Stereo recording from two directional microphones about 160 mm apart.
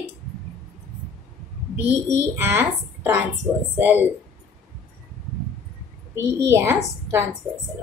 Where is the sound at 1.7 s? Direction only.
15° right (ahead or behind).